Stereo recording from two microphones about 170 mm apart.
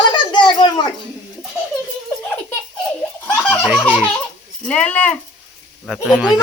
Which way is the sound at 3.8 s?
10° right (ahead or behind).